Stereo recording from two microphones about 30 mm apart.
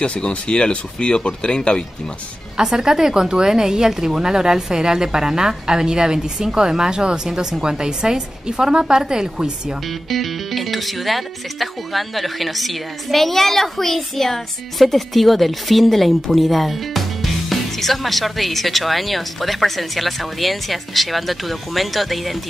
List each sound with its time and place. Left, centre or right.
0.0 s speech: left
2.5 s a woman's voice: right
10.0 s speech: centre